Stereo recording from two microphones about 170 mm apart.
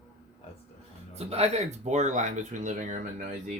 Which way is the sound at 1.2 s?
35° right (ahead or behind).